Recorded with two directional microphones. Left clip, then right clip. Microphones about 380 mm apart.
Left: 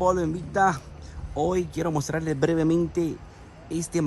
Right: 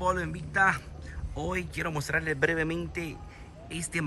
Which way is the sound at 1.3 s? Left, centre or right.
Centre.